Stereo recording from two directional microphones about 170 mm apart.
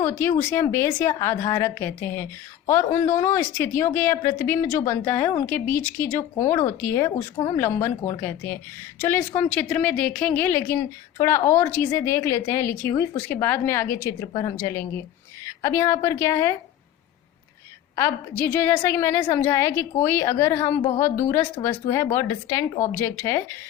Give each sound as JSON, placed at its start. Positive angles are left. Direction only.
{"t": 0.0, "sound": "a woman's voice", "side_deg": 15}
{"t": 17.9, "sound": "a woman's voice", "side_deg": 15}